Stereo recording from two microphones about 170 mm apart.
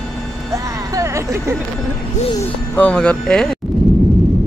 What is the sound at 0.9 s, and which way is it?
Speech, 20° right (ahead or behind).